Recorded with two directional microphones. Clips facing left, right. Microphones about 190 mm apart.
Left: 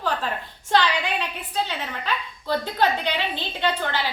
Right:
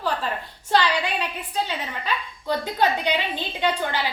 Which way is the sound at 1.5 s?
10° right (ahead or behind).